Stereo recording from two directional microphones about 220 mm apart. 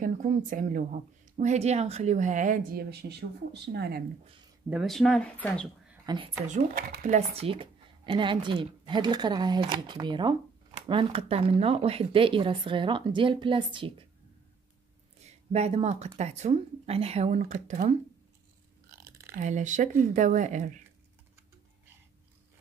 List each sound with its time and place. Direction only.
0.0 s speech: 35° right (ahead or behind)
4.6 s speech: centre (ahead or behind)
6.0 s speech: 20° right (ahead or behind)
6.4 s speech: 35° right (ahead or behind)
15.2 s speech: 30° right (ahead or behind)
18.9 s a sound: 15° right (ahead or behind)
19.3 s speech: 35° right (ahead or behind)